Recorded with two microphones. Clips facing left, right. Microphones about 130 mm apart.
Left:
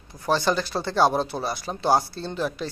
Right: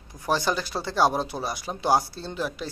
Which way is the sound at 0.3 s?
10° right (ahead or behind).